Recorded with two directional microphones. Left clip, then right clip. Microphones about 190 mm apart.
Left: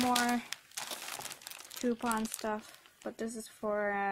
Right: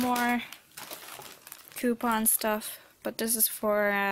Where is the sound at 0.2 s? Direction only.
Centre (ahead or behind).